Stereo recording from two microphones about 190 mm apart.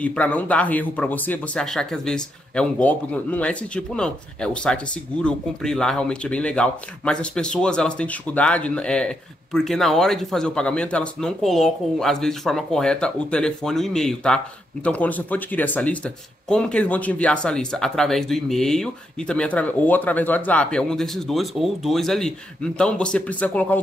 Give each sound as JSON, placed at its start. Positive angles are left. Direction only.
{"t": 0.0, "sound": "speech", "side_deg": 5}